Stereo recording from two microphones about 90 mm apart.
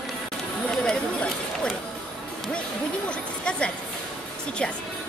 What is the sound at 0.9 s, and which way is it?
Speech, 10° left (ahead or behind).